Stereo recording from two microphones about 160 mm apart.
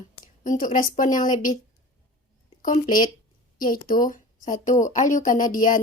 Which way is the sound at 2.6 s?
60° left (ahead or behind).